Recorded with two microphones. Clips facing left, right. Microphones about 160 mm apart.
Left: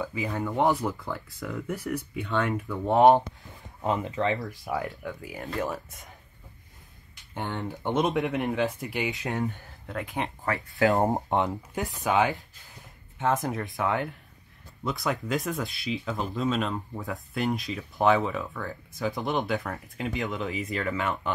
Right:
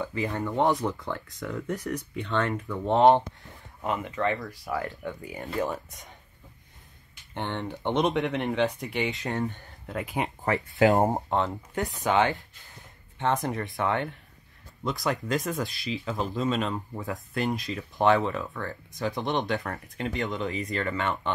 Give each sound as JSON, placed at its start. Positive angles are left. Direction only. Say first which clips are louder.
{"t": 0.0, "sound": "speech", "louder": "right 1 dB", "side_deg": 5}
{"t": 3.8, "sound": "speech", "louder": "left 1 dB", "side_deg": 35}
{"t": 4.5, "sound": "speech", "louder": "left 1 dB", "side_deg": 5}
{"t": 7.3, "sound": "speech", "louder": "right 1 dB", "side_deg": 0}
{"t": 10.8, "sound": "speech", "louder": "right 2 dB", "side_deg": -20}
{"t": 11.2, "sound": "speech", "louder": "left 1 dB", "side_deg": 15}
{"t": 11.5, "sound": "speech", "louder": "right 1 dB", "side_deg": 5}